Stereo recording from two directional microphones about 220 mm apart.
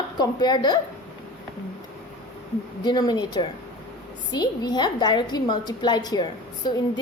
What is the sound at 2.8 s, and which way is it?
A woman's voice, 20° left (ahead or behind).